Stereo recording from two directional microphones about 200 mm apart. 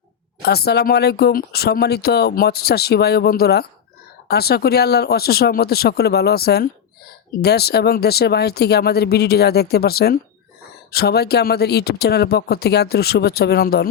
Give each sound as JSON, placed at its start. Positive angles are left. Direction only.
{"t": 0.4, "sound": "speech", "side_deg": 55}